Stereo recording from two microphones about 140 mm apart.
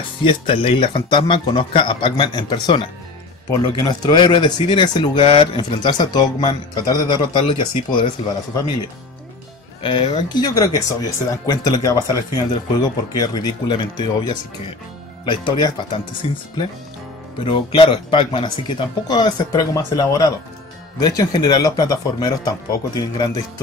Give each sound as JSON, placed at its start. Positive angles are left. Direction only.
{"t": 0.2, "sound": "speech", "side_deg": 40}
{"t": 9.8, "sound": "speech", "side_deg": 35}